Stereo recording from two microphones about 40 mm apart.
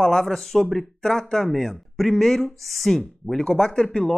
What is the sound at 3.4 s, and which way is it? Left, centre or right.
Speech, left.